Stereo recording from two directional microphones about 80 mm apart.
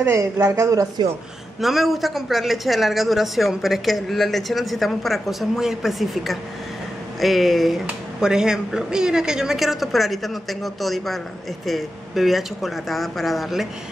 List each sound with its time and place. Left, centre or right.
0.1 s speech: right
1.6 s a man's voice: centre